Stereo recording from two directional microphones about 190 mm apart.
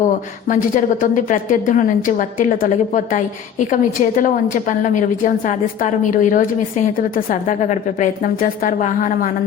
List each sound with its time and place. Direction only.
0.4 s a woman's voice: 45° left (ahead or behind)